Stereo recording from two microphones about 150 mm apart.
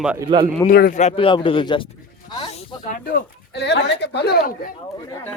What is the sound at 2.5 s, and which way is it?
Speech, 45° left (ahead or behind).